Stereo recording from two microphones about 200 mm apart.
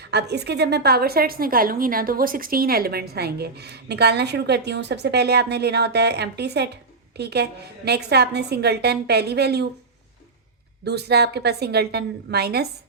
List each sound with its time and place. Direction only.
0.0 s a woman's voice: 55° right (ahead or behind)
10.8 s a woman's voice: 55° right (ahead or behind)